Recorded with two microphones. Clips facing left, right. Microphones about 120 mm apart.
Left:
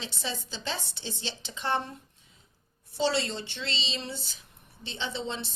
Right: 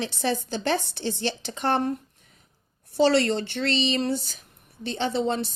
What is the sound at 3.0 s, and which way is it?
A woman's voice, 65° right (ahead or behind).